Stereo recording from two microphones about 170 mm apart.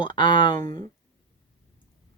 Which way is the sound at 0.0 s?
25° left (ahead or behind).